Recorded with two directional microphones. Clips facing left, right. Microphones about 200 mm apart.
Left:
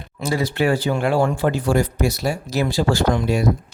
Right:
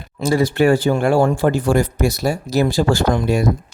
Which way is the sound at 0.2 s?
45° right (ahead or behind).